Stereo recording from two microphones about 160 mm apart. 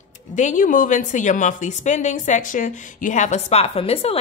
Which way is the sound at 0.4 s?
50° left (ahead or behind).